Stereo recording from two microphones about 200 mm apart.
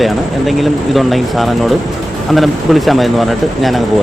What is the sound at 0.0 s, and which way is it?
Speech, centre (ahead or behind).